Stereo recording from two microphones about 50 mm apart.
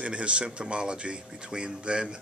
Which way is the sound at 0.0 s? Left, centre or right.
Right.